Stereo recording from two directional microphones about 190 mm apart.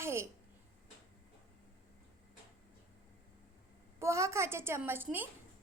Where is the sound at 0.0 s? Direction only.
15° right (ahead or behind).